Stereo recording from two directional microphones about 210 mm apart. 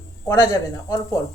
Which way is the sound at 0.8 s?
15° left (ahead or behind).